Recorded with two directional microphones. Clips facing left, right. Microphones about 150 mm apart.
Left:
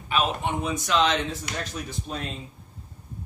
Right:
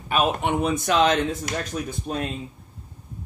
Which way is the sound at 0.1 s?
55° right (ahead or behind).